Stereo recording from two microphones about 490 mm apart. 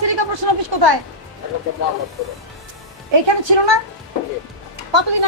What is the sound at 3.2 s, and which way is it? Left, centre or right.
Speech, right.